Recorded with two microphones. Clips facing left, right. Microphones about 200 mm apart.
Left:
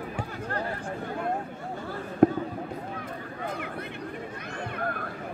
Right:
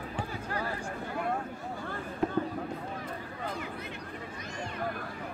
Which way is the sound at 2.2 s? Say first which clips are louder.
Left 11 dB; 60° left (ahead or behind).